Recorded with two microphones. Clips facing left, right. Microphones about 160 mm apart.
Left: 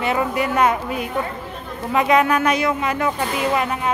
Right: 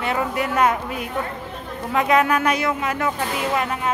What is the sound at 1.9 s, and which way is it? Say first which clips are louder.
Speech: left 2 dB; 5° left (ahead or behind).